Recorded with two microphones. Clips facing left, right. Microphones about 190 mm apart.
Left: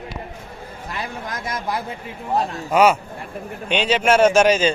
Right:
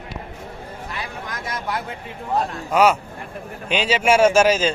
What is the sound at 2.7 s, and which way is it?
A man's voice, centre (ahead or behind).